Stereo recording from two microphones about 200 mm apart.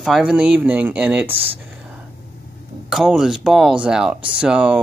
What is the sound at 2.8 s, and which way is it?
Speech, 5° right (ahead or behind).